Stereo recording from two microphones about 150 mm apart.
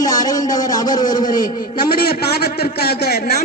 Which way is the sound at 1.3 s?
70° left (ahead or behind).